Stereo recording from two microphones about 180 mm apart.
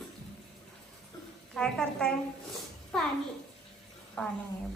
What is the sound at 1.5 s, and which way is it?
Speech, 5° left (ahead or behind).